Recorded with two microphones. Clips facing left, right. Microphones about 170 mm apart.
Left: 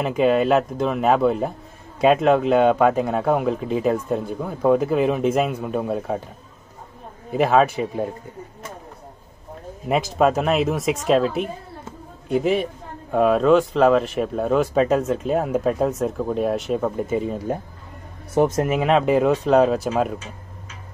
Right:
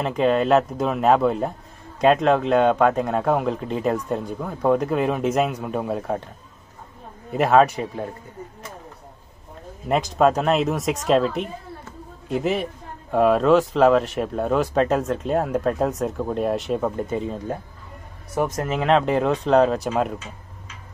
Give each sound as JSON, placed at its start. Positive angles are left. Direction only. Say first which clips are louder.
{"t": 0.0, "sound": "speech", "louder": "left 2 dB", "side_deg": 5}
{"t": 7.2, "sound": "speech", "louder": "right 1 dB", "side_deg": 0}
{"t": 9.8, "sound": "speech", "louder": "even", "side_deg": 5}
{"t": 18.3, "sound": "a man's voice", "louder": "left 5 dB", "side_deg": 25}
{"t": 18.7, "sound": "speech", "louder": "left 1 dB", "side_deg": 5}